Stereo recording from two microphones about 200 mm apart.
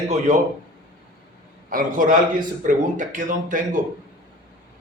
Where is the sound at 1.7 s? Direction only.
40° right (ahead or behind).